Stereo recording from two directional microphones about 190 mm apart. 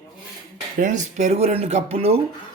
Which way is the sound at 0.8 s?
40° right (ahead or behind).